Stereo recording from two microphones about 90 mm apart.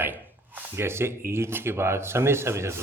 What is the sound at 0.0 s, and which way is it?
Speech, 20° right (ahead or behind).